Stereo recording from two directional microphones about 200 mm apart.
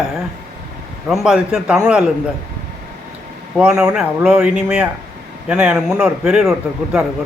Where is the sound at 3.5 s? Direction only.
5° right (ahead or behind).